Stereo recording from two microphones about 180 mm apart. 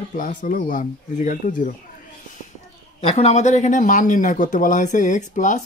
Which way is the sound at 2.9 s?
35° left (ahead or behind).